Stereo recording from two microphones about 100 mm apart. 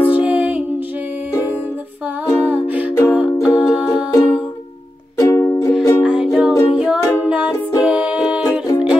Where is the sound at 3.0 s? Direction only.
15° right (ahead or behind).